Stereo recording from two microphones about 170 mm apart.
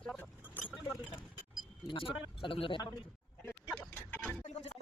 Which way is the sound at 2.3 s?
35° left (ahead or behind).